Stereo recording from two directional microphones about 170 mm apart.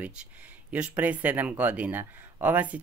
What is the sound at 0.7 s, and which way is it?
Speech, 10° right (ahead or behind).